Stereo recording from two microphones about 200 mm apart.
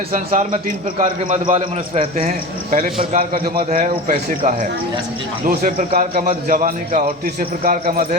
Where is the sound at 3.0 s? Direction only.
30° right (ahead or behind).